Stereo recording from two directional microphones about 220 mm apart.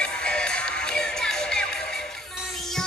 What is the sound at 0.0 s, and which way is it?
Music, 5° left (ahead or behind).